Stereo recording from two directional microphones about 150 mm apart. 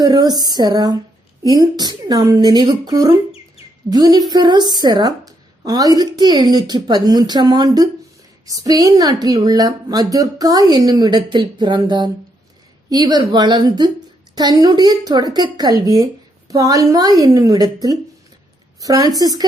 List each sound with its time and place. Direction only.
0.0 s a woman's voice: 25° right (ahead or behind)